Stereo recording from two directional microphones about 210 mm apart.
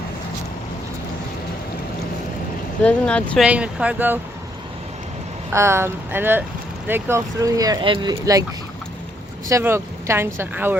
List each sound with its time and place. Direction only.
2.8 s speech: 5° left (ahead or behind)
3.4 s speech: 5° right (ahead or behind)
5.5 s speech: 10° right (ahead or behind)
9.5 s speech: 15° right (ahead or behind)